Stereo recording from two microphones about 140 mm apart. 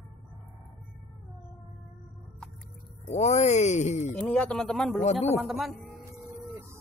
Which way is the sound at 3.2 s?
55° left (ahead or behind).